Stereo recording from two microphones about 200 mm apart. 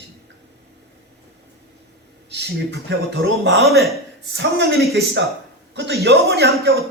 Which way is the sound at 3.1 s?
60° right (ahead or behind).